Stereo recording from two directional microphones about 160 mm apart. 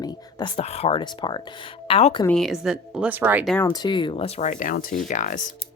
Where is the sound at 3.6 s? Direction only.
25° left (ahead or behind); by 5.5 s 55° left (ahead or behind).